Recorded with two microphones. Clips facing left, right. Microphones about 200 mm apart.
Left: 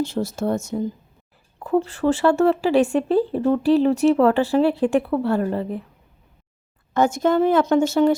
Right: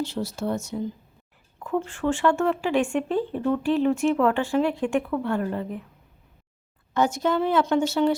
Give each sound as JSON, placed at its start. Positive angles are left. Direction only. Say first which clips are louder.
{"t": 0.0, "sound": "a woman's voice", "louder": "left 5 dB", "side_deg": 45}
{"t": 1.5, "sound": "speech", "louder": "left 6 dB", "side_deg": 35}
{"t": 6.9, "sound": "a woman's voice", "louder": "left 5 dB", "side_deg": 50}